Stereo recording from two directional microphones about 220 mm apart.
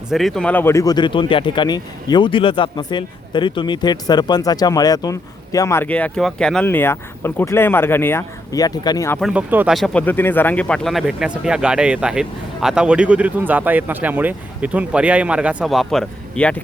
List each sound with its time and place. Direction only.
0.1 s speech: centre (ahead or behind); by 9.1 s 15° left (ahead or behind)
9.2 s speech: 5° right (ahead or behind)